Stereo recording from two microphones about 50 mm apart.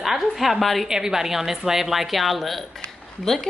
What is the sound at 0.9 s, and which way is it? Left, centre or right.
A woman's voice, centre.